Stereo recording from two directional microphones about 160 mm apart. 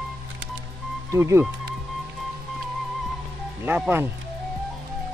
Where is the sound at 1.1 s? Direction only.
15° right (ahead or behind).